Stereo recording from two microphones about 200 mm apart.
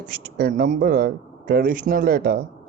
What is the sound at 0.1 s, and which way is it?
Speech, 45° right (ahead or behind).